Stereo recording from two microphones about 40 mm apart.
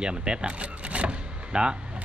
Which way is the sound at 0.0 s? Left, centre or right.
Right.